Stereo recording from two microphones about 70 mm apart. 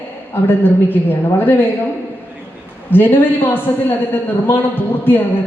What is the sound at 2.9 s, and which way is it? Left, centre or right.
A man's voice, left.